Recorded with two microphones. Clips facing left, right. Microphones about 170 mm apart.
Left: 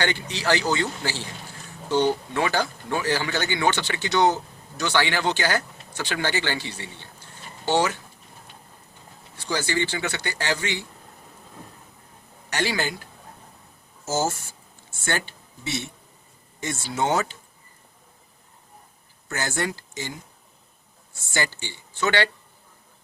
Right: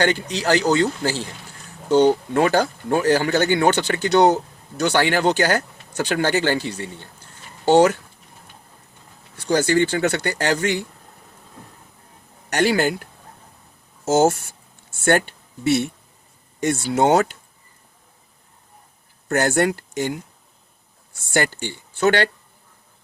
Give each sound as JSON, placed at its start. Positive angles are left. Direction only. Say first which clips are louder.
{"t": 0.0, "sound": "speech", "louder": "right 6 dB", "side_deg": -40}
{"t": 2.3, "sound": "speech", "louder": "right 7 dB", "side_deg": -50}
{"t": 9.5, "sound": "speech", "louder": "right 8 dB", "side_deg": -50}
{"t": 12.5, "sound": "speech", "louder": "right 8 dB", "side_deg": -50}
{"t": 14.0, "sound": "speech", "louder": "right 9 dB", "side_deg": -70}
{"t": 19.3, "sound": "speech", "louder": "right 9 dB", "side_deg": -60}
{"t": 21.2, "sound": "speech", "louder": "right 7 dB", "side_deg": -60}